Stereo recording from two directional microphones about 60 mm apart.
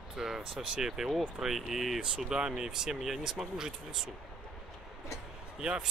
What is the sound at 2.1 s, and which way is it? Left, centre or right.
Speech, centre.